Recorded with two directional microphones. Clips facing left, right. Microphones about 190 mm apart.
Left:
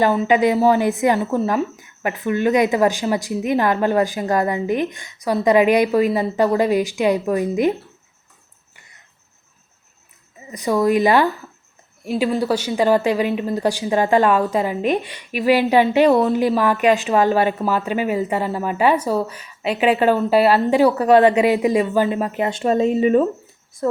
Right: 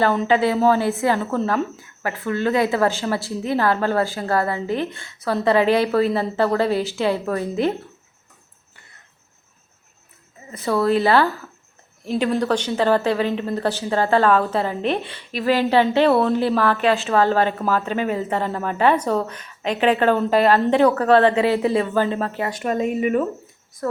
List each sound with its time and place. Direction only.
0.0 s speech: 10° left (ahead or behind)
10.5 s speech: 15° left (ahead or behind)
12.0 s speech: 5° left (ahead or behind)
22.4 s speech: 25° left (ahead or behind)